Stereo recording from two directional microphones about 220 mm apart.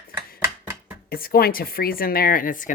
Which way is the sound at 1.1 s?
40° left (ahead or behind).